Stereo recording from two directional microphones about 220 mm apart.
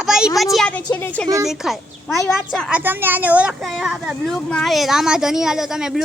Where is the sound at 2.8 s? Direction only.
10° right (ahead or behind).